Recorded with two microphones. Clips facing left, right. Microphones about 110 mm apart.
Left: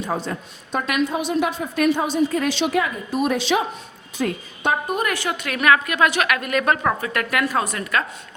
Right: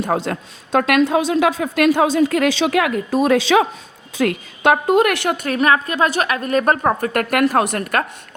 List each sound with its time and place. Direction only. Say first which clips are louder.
0.0 s a woman's voice: right 5 dB; 65° right (ahead or behind); by 6.9 s 35° right (ahead or behind)
7.0 s speech: right 6 dB; 50° right (ahead or behind)